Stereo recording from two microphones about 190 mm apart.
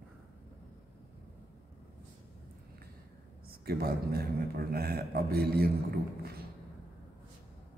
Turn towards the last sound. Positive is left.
turn(degrees=-55)  # may be behind; listen again after turning